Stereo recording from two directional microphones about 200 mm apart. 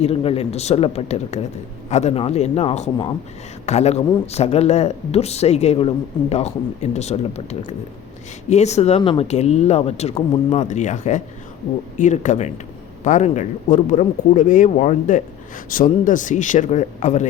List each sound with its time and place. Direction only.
0.0 s speech: 30° left (ahead or behind)